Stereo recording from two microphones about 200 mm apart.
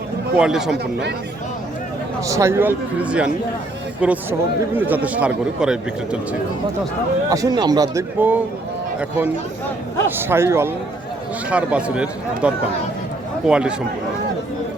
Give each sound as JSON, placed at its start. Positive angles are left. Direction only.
{"t": 0.3, "sound": "speech", "side_deg": -5}
{"t": 2.2, "sound": "a man's voice", "side_deg": -15}
{"t": 7.3, "sound": "a man's voice", "side_deg": -15}
{"t": 13.5, "sound": "speech", "side_deg": -5}